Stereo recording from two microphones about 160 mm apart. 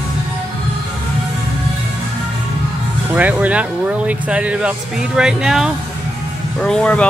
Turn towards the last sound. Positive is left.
turn(degrees=5)  # may be behind; listen again after turning